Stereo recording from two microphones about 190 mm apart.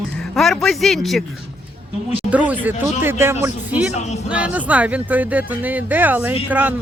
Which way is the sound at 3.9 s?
35° left (ahead or behind).